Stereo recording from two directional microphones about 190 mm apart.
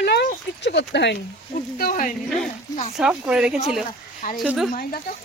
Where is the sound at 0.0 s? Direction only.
60° left (ahead or behind).